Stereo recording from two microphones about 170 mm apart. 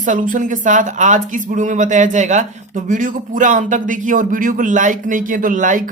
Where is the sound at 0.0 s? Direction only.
50° right (ahead or behind).